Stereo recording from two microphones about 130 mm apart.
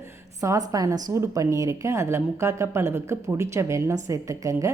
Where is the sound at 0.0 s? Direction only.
25° right (ahead or behind).